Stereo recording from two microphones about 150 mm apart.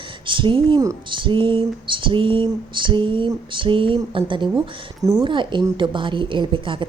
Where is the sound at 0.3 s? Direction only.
35° right (ahead or behind).